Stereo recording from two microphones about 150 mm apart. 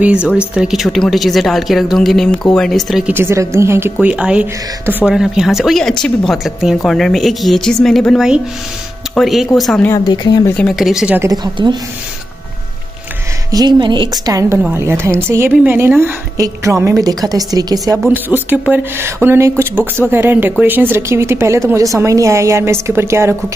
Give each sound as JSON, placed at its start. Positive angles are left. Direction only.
{"t": 0.0, "sound": "speech", "side_deg": -5}
{"t": 9.8, "sound": "speech", "side_deg": 30}
{"t": 10.4, "sound": "speech", "side_deg": 10}
{"t": 10.8, "sound": "speech", "side_deg": -5}
{"t": 11.1, "sound": "a woman's voice", "side_deg": -25}
{"t": 13.5, "sound": "a woman's voice", "side_deg": -30}
{"t": 18.1, "sound": "a woman's voice", "side_deg": -15}